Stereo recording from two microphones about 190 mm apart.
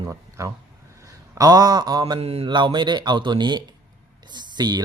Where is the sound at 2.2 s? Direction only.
30° right (ahead or behind).